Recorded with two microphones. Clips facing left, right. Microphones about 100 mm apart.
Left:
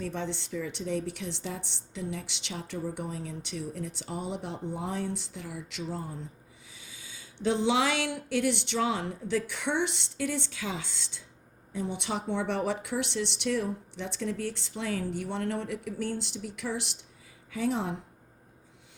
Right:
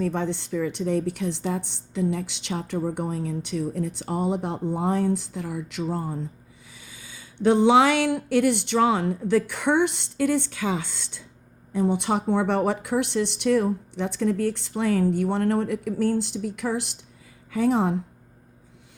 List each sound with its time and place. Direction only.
0.0 s a woman's voice: 50° right (ahead or behind)